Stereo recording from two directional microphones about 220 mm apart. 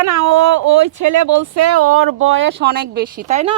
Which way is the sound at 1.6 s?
90° right.